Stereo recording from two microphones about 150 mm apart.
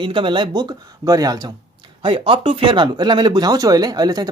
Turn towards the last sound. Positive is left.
turn(degrees=-25)  # may be behind; listen again after turning